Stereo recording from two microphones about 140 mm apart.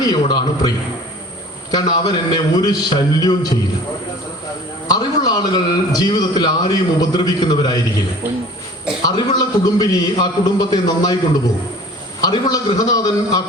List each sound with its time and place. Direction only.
0.0 s a man's voice: 30° left (ahead or behind)
1.7 s a man's voice: 30° left (ahead or behind)
4.9 s a man's voice: 25° left (ahead or behind)
9.0 s a man's voice: 25° left (ahead or behind)
12.2 s a man's voice: 30° left (ahead or behind)